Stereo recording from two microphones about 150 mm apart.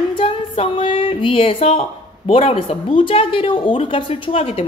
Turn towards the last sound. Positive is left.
turn(degrees=40)  # may be behind; listen again after turning